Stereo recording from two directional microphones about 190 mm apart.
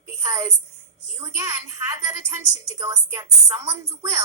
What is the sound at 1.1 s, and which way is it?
Speech, 15° right (ahead or behind).